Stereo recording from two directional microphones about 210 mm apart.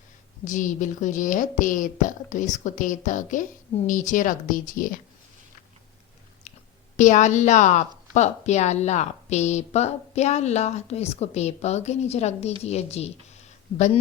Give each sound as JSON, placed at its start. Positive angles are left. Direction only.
{"t": 0.4, "sound": "a woman's voice", "side_deg": 35}
{"t": 6.9, "sound": "a woman's voice", "side_deg": 35}